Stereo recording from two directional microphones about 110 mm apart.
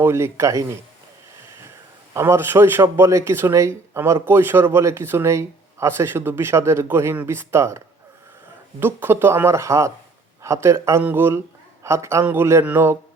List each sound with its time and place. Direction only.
0.0 s speech: 25° right (ahead or behind)
2.1 s speech: 25° right (ahead or behind)
8.8 s a man's voice: 20° right (ahead or behind)